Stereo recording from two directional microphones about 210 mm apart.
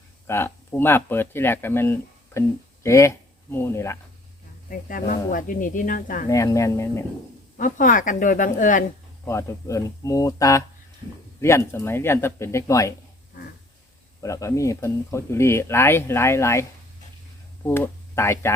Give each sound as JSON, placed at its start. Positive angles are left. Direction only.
{"t": 0.3, "sound": "speech", "side_deg": 10}
{"t": 4.7, "sound": "speech", "side_deg": 40}
{"t": 6.2, "sound": "speech", "side_deg": 15}
{"t": 7.5, "sound": "speech", "side_deg": 40}
{"t": 9.2, "sound": "speech", "side_deg": 15}
{"t": 14.2, "sound": "speech", "side_deg": 15}
{"t": 17.7, "sound": "speech", "side_deg": 10}